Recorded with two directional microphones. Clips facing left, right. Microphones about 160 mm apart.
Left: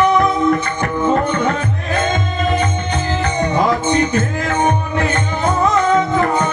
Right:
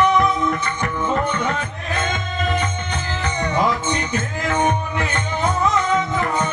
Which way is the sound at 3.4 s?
40° left (ahead or behind).